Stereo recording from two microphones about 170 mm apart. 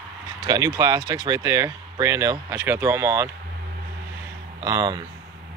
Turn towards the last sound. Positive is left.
turn(degrees=-20)  # may be behind; listen again after turning